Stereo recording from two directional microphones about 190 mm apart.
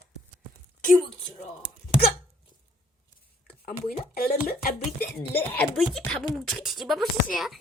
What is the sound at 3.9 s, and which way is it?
Speech, 50° left (ahead or behind).